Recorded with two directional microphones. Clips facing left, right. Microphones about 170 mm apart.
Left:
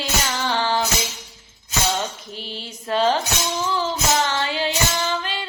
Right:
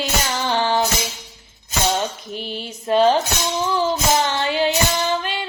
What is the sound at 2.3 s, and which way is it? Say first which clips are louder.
Mantra: right 5 dB; 15° right (ahead or behind).